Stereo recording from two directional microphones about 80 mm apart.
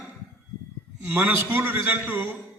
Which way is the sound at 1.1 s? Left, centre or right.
Right.